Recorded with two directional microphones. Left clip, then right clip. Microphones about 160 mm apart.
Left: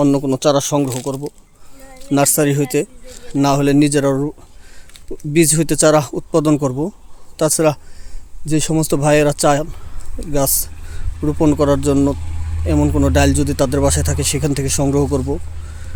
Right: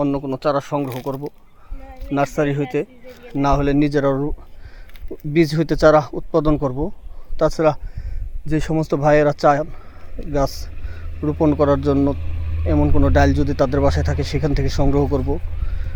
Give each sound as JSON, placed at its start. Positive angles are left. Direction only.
{"t": 0.0, "sound": "a man's voice", "side_deg": 50}
{"t": 2.1, "sound": "a man's voice", "side_deg": 50}
{"t": 4.9, "sound": "a sound", "side_deg": -70}
{"t": 5.3, "sound": "speech", "side_deg": 35}